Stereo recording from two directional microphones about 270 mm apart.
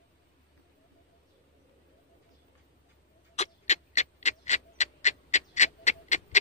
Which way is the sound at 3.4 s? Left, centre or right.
Left.